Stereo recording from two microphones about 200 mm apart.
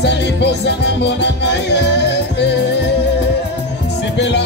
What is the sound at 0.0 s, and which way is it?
Music, 60° left (ahead or behind).